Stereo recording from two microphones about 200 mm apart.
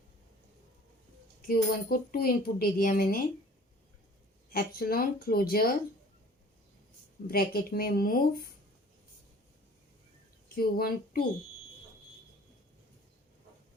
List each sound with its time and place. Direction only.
1.5 s a woman's voice: 50° left (ahead or behind)
4.5 s a woman's voice: 50° left (ahead or behind)
7.3 s a woman's voice: 50° left (ahead or behind)
10.5 s speech: 50° left (ahead or behind)